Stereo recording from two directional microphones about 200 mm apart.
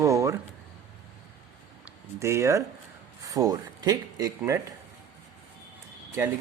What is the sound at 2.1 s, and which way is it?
A man's voice, 15° right (ahead or behind).